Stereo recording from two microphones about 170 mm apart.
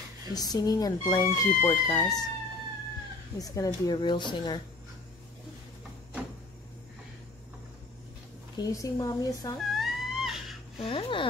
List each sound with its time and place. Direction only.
0.3 s speech: 20° left (ahead or behind)
3.3 s speech: 20° left (ahead or behind)
8.5 s speech: 20° left (ahead or behind)
9.6 s a sound: centre (ahead or behind)
10.8 s speech: 30° left (ahead or behind)